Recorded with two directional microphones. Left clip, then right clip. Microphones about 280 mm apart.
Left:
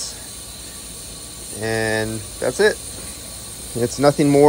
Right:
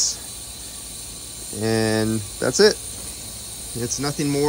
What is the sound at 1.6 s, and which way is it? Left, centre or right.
Speech, centre.